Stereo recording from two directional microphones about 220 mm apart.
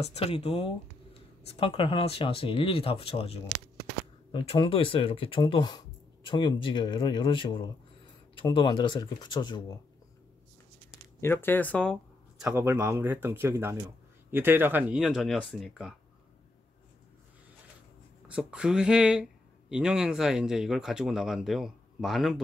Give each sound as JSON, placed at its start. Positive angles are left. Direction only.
{"t": 0.0, "sound": "speech", "side_deg": 30}
{"t": 10.9, "sound": "a sound", "side_deg": 10}
{"t": 12.4, "sound": "speech", "side_deg": -10}
{"t": 18.3, "sound": "speech", "side_deg": -5}